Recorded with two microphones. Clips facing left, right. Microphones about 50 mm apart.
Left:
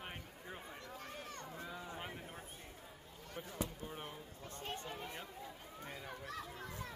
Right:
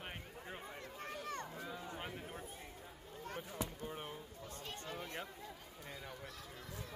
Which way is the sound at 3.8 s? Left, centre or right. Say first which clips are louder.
Right 2 dB; centre.